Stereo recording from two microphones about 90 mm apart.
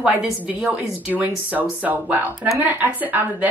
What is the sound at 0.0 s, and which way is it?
A woman's voice, 10° right (ahead or behind).